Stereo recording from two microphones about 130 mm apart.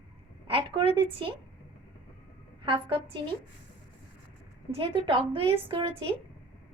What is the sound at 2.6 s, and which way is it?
Speech, 45° right (ahead or behind).